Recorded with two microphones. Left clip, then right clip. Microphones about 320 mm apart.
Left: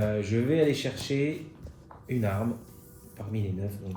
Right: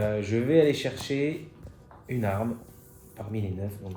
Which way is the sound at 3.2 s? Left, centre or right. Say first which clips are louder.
Right 1 dB; centre.